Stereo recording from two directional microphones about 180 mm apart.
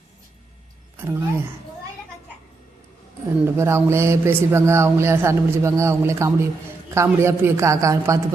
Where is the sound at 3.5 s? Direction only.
15° right (ahead or behind).